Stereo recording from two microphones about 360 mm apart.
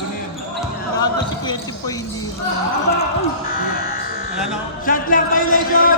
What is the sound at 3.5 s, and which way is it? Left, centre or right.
Music, left.